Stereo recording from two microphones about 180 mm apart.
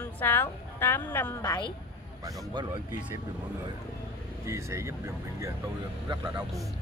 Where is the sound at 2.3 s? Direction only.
20° right (ahead or behind).